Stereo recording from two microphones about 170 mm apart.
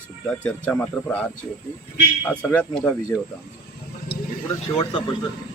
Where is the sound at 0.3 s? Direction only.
5° left (ahead or behind).